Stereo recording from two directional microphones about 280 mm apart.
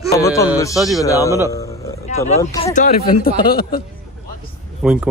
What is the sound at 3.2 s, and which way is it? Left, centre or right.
Speech, left.